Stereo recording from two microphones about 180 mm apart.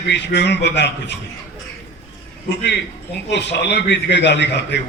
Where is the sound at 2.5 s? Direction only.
70° left (ahead or behind).